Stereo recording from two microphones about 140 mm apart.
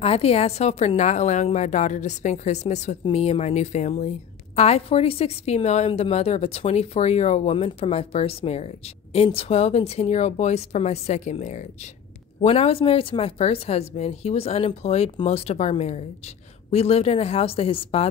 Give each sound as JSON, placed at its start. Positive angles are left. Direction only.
{"t": 0.0, "sound": "a woman's voice", "side_deg": 45}